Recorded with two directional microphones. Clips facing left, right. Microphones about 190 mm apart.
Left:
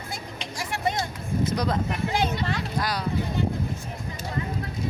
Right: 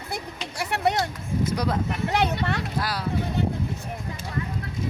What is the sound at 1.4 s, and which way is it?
Speech, 10° right (ahead or behind).